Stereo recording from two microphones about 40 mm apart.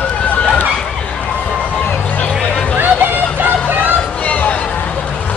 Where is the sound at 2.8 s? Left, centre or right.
Right.